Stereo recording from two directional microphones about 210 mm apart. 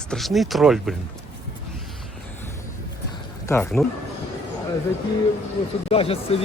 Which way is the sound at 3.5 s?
10° left (ahead or behind).